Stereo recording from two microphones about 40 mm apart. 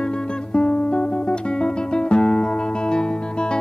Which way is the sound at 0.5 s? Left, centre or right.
Left.